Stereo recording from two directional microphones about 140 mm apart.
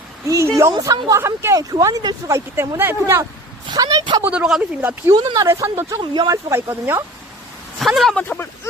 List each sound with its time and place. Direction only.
0.3 s a sound: 20° right (ahead or behind)
0.7 s speech: 30° right (ahead or behind)
3.7 s a sound: 25° right (ahead or behind)
4.2 s a woman's voice: 10° right (ahead or behind)
5.1 s speech: 25° right (ahead or behind)
7.8 s speech: centre (ahead or behind)
8.2 s speech: 15° left (ahead or behind)